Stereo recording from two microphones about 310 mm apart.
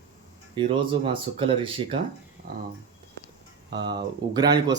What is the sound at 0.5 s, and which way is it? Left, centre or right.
Speech, centre.